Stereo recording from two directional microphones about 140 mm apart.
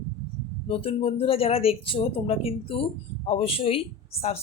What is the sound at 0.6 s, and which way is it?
Speech, 40° left (ahead or behind).